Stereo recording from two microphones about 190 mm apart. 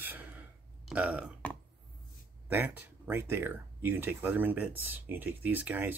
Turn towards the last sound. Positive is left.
turn(degrees=-10)  # may be behind; listen again after turning